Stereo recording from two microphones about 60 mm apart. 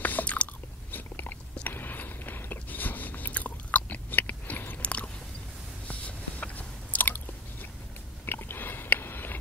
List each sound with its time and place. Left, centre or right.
0.0 s chewing: left
0.9 s biting: left
4.8 s chewing: left
5.9 s biting: left
8.3 s biting: left